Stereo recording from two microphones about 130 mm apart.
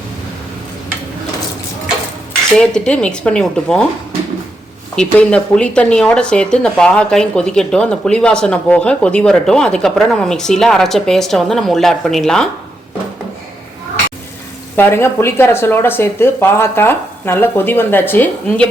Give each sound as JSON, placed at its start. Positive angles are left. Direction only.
{"t": 2.6, "sound": "speech", "side_deg": 5}
{"t": 5.0, "sound": "speech", "side_deg": 5}
{"t": 14.8, "sound": "speech", "side_deg": 20}